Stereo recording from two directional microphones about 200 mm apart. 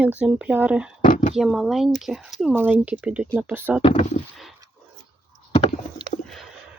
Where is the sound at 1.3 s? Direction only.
Centre (ahead or behind).